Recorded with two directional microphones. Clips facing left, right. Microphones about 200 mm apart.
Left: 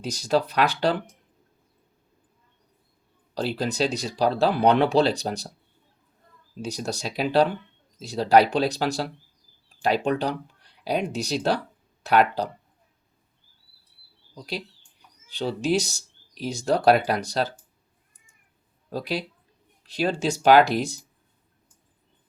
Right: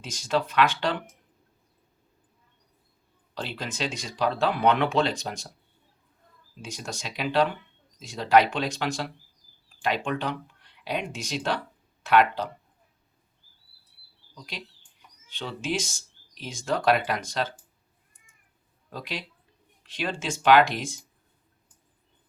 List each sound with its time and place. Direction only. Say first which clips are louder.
0.0 s speech: left 4 dB; 40° left (ahead or behind)
3.3 s speech: left 8 dB; 40° left (ahead or behind)
6.6 s speech: left 7 dB; 40° left (ahead or behind)
14.3 s speech: left 8 dB; 35° left (ahead or behind)
18.9 s speech: left 7 dB; 40° left (ahead or behind)